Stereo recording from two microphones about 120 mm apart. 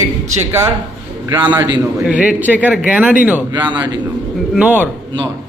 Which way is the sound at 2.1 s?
10° right (ahead or behind).